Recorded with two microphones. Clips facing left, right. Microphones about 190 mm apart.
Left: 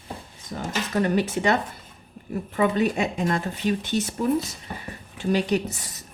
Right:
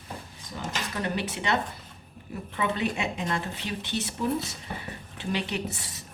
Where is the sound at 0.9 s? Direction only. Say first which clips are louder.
Left 10 dB; 45° left (ahead or behind).